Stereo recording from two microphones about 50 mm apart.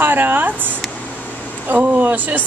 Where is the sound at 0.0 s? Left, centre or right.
Right.